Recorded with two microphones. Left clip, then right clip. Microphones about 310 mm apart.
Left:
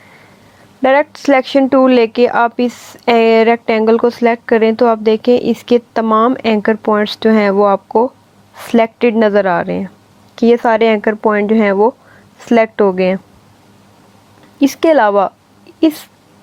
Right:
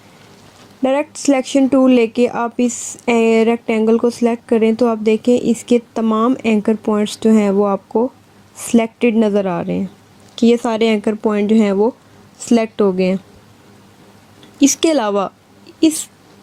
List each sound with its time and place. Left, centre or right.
0.8 s a woman's voice: left
14.6 s a woman's voice: left